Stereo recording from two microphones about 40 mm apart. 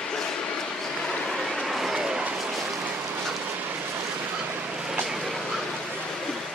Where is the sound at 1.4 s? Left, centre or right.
Centre.